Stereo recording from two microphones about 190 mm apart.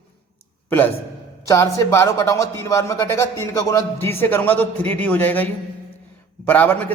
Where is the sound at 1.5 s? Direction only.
15° left (ahead or behind).